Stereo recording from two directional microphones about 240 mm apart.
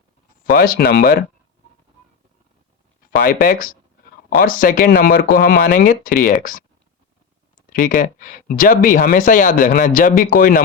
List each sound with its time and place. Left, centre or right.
0.5 s speech: left
3.2 s speech: left
7.7 s speech: left